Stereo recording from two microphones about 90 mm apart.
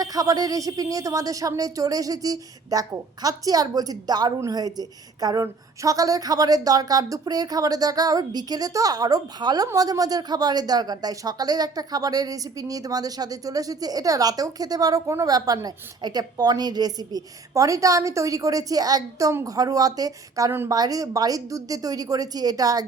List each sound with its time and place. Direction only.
0.0 s speech: 45° right (ahead or behind)